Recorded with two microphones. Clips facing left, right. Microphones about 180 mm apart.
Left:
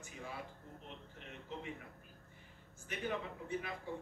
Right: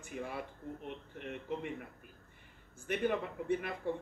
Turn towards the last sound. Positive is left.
turn(degrees=-60)  # may be behind; listen again after turning